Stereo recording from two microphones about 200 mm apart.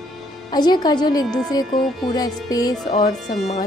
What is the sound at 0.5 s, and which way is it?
Speech, 20° left (ahead or behind).